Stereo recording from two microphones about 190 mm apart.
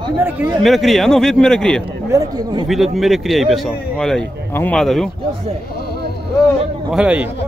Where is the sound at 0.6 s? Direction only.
Centre (ahead or behind).